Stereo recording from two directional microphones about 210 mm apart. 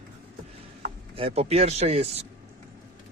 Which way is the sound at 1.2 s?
30° right (ahead or behind).